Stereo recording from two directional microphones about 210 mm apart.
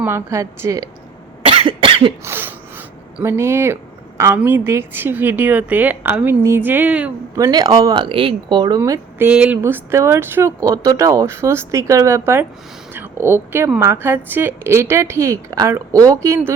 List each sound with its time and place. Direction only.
0.0 s a woman's voice: 10° right (ahead or behind)
1.4 s cough: 25° right (ahead or behind)
2.2 s a woman's voice: 10° right (ahead or behind)